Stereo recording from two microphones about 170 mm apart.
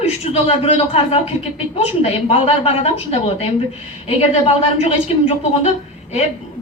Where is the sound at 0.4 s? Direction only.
35° left (ahead or behind).